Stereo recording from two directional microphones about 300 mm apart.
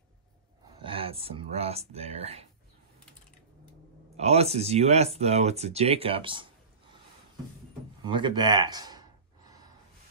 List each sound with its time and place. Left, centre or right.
0.7 s speech: centre
4.2 s speech: right
8.0 s gasp: centre